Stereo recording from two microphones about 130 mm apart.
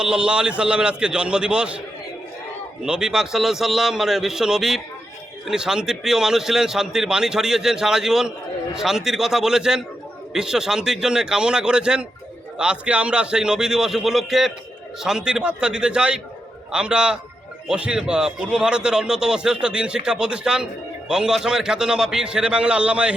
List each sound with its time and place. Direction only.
0.0 s a man's voice: 5° right (ahead or behind)
2.8 s a man's voice: 5° right (ahead or behind)